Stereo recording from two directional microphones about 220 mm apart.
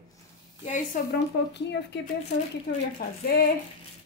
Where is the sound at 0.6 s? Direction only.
35° left (ahead or behind).